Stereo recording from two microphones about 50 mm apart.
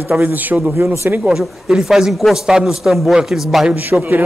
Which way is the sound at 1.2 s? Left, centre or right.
Centre.